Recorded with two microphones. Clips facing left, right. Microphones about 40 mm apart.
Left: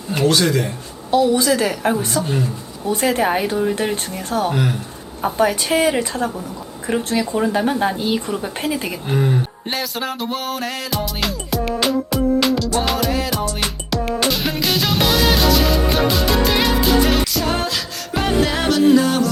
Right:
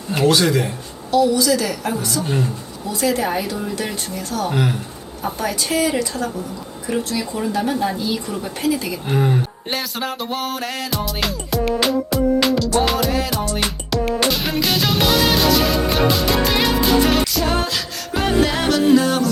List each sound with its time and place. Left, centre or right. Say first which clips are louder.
0.1 s speech: right 1 dB; centre
1.1 s speech: even; left
2.2 s speech: even; centre
2.8 s speech: left 2 dB; left
4.5 s speech: even; centre
5.2 s speech: left 6 dB; left
9.0 s music: even; centre